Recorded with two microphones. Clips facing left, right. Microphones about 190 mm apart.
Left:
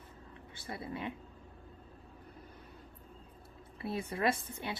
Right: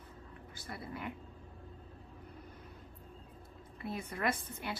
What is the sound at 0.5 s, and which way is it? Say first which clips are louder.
Speech: left 3 dB; 25° left (ahead or behind).